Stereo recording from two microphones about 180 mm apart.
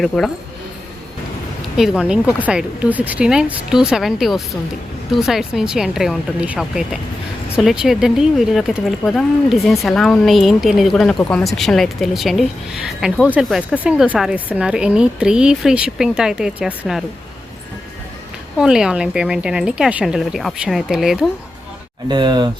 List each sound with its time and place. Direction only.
0.1 s speech: centre (ahead or behind)
1.7 s speech: centre (ahead or behind)
18.5 s speech: 5° right (ahead or behind)
22.1 s speech: 25° right (ahead or behind)